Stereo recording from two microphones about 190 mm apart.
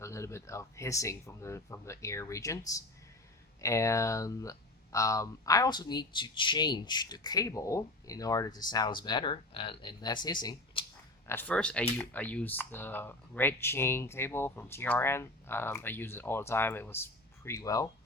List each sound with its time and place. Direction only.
0.0 s speech: 15° left (ahead or behind)
3.6 s speech: 15° left (ahead or behind)
11.3 s speech: 10° left (ahead or behind)